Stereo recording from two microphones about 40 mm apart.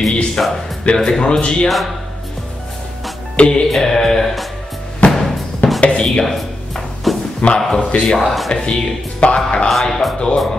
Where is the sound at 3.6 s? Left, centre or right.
Centre.